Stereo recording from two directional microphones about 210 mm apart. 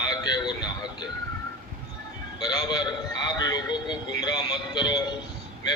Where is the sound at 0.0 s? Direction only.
20° left (ahead or behind).